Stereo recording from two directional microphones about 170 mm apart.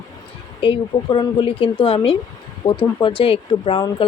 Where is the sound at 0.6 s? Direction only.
30° left (ahead or behind).